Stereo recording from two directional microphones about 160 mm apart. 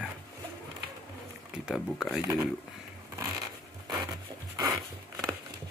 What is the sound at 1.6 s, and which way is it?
Speech, centre (ahead or behind).